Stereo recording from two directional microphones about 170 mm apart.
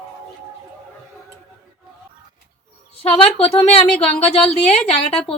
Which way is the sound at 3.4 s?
35° left (ahead or behind).